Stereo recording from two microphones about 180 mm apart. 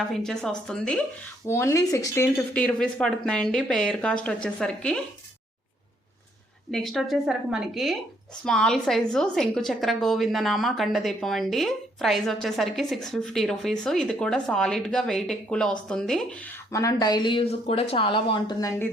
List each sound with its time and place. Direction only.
0.1 s a woman's voice: 5° left (ahead or behind)
1.5 s a woman's voice: 15° left (ahead or behind)
6.7 s a woman's voice: centre (ahead or behind)
16.7 s speech: 20° left (ahead or behind)